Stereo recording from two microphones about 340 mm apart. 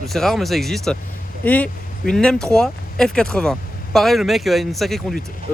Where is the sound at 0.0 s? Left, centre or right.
Centre.